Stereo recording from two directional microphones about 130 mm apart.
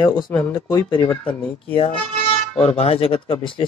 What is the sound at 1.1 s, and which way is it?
Speech, 10° left (ahead or behind).